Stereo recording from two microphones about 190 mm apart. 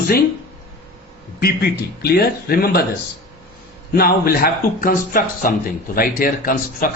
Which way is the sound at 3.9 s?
55° left (ahead or behind).